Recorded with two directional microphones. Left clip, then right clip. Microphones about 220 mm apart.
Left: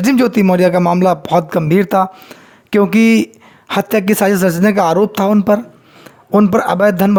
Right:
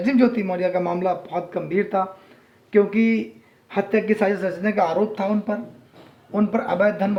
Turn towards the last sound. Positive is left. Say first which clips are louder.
# left 8 dB
turn(degrees=55)  # may be behind; listen again after turning